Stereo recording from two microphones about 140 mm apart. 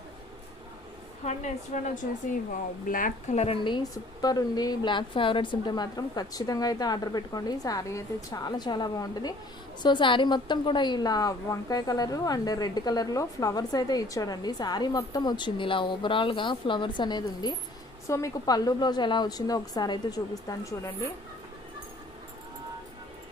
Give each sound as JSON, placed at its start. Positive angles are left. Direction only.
{"t": 1.2, "sound": "a woman's voice", "side_deg": 60}
{"t": 2.8, "sound": "a woman's voice", "side_deg": 75}